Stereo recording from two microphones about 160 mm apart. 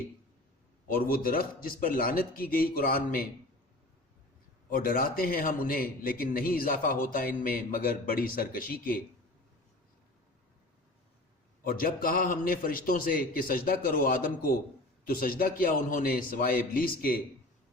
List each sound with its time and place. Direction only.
0.9 s a man's voice: 60° left (ahead or behind)
4.7 s a man's voice: 65° left (ahead or behind)
11.6 s a man's voice: 65° left (ahead or behind)